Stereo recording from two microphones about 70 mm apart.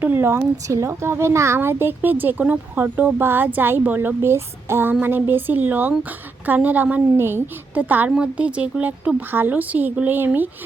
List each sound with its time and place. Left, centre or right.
0.0 s speech: right
0.7 s a woman's voice: right